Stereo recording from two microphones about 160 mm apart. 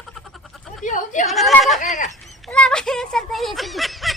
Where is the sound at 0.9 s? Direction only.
50° left (ahead or behind).